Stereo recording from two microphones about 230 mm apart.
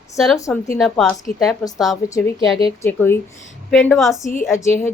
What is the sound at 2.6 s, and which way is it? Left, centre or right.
A woman's voice, centre.